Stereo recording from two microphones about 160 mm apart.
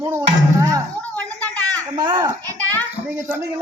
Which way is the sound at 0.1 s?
20° right (ahead or behind).